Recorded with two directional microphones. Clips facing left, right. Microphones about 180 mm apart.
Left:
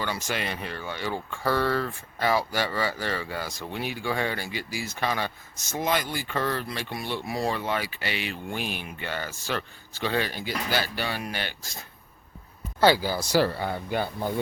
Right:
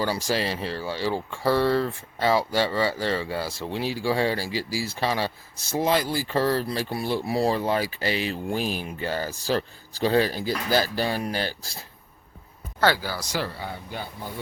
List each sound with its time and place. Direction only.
0.0 s speech: 35° right (ahead or behind)
12.8 s speech: 15° left (ahead or behind)
13.6 s speech: 60° left (ahead or behind)